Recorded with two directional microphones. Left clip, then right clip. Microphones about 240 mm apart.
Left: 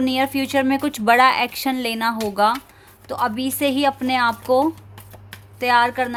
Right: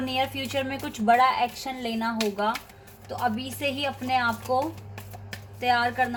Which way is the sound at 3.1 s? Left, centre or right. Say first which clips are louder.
Left 6 dB; left.